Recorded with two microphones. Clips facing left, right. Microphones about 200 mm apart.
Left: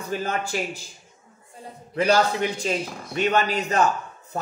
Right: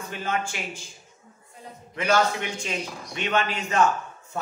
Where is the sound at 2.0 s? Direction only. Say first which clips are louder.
Left 3 dB; 35° left (ahead or behind).